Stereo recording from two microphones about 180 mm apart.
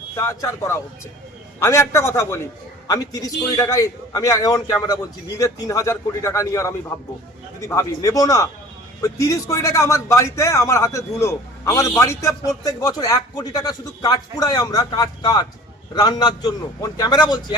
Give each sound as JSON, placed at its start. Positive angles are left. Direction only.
{"t": 0.2, "sound": "a man's voice", "side_deg": 15}